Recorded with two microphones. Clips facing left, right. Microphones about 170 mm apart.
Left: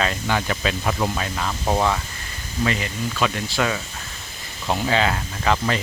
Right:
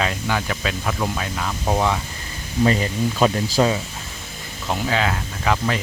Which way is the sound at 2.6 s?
35° right (ahead or behind).